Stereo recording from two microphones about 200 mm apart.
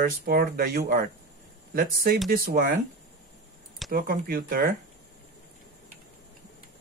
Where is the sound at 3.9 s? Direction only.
45° right (ahead or behind).